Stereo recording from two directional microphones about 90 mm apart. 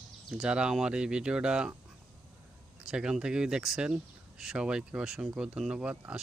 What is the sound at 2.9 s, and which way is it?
Speech, 10° right (ahead or behind).